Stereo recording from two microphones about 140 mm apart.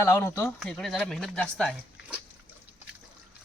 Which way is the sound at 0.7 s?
5° left (ahead or behind).